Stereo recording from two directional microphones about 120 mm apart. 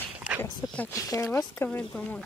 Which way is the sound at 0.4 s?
20° left (ahead or behind).